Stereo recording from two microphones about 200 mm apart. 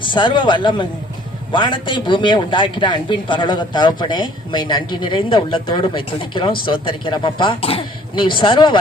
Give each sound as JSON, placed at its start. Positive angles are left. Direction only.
{"t": 0.0, "sound": "a man's voice", "side_deg": 25}